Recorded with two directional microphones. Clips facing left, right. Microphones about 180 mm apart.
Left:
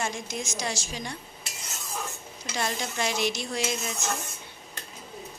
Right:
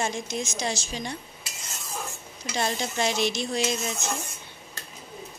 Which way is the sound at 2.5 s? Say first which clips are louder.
Right 3 dB; 25° right (ahead or behind).